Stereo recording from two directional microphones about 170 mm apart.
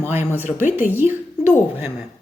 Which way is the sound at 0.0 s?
15° right (ahead or behind).